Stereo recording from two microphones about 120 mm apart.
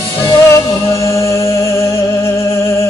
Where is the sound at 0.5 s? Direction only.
25° left (ahead or behind).